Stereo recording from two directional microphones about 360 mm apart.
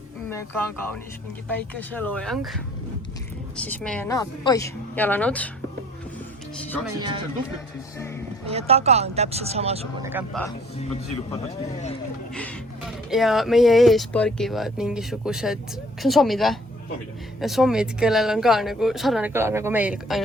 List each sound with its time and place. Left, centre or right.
0.3 s speech: centre
3.6 s speech: centre
6.6 s speech: centre
7.9 s speech: centre
8.4 s speech: centre
10.1 s speech: centre
11.3 s speech: centre
12.3 s speech: centre